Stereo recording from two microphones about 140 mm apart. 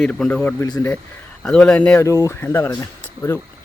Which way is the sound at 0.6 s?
25° left (ahead or behind).